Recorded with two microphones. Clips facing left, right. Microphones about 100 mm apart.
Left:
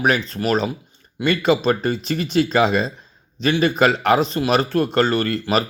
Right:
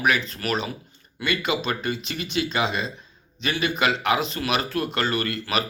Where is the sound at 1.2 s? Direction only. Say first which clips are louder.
Left 8 dB; 35° left (ahead or behind).